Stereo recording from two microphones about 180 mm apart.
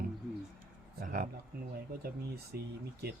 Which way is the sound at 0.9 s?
50° right (ahead or behind).